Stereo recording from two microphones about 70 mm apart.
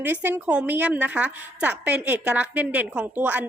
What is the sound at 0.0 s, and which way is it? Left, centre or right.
A woman's voice, right.